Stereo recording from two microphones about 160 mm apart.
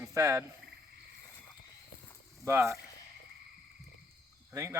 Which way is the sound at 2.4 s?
15° right (ahead or behind).